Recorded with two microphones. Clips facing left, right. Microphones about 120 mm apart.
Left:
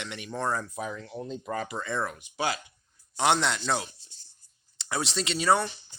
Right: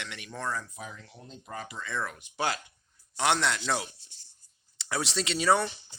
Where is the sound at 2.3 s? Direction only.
5° left (ahead or behind).